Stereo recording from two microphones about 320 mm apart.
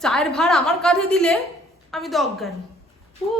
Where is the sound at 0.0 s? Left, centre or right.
Centre.